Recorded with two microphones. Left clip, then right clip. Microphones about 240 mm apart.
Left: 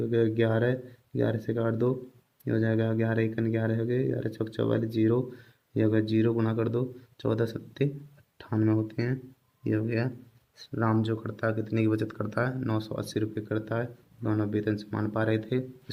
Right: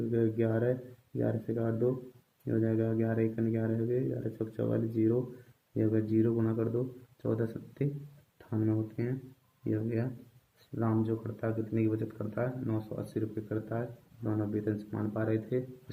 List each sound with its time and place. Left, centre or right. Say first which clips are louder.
0.1 s speech: left 5 dB; left